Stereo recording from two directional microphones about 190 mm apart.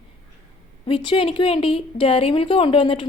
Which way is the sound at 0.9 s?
30° left (ahead or behind).